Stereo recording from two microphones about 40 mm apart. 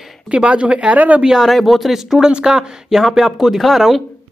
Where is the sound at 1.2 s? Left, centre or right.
Centre.